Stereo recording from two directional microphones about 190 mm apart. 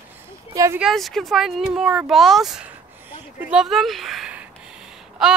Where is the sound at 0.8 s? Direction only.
Centre (ahead or behind).